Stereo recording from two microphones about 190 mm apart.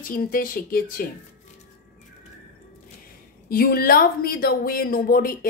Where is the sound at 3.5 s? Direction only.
50° left (ahead or behind).